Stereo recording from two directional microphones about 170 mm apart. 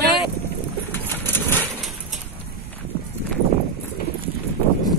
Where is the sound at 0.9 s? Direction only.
10° left (ahead or behind).